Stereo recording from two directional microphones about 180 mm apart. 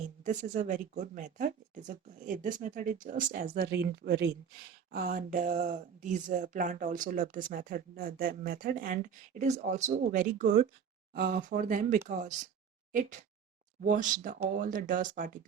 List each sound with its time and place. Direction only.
0.3 s speech: 45° right (ahead or behind)